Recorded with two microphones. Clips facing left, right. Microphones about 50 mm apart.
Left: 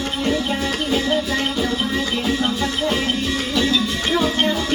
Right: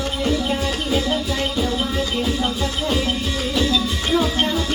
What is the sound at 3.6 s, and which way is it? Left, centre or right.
Music, left.